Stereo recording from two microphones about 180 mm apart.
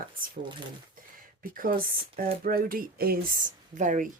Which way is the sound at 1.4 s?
50° right (ahead or behind).